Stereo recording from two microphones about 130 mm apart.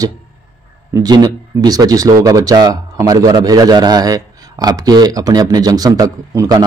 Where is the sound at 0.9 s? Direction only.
30° right (ahead or behind).